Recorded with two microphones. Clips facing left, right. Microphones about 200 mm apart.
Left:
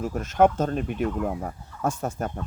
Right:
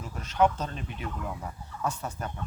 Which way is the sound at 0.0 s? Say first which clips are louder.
Left 5 dB; 50° left (ahead or behind).